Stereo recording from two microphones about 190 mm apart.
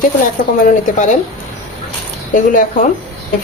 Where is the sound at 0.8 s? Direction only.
40° left (ahead or behind).